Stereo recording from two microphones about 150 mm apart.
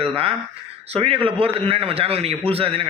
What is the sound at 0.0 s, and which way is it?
A man's voice, 40° right (ahead or behind).